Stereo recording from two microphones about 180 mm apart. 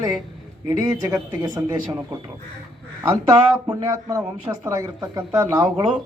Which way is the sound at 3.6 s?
20° right (ahead or behind).